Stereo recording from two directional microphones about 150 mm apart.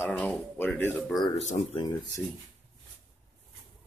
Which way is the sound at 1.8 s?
30° left (ahead or behind).